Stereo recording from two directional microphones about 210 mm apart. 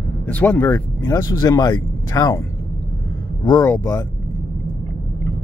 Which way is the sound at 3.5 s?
15° left (ahead or behind).